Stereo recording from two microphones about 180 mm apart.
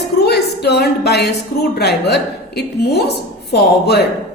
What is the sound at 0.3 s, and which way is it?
A woman's voice, 65° left (ahead or behind).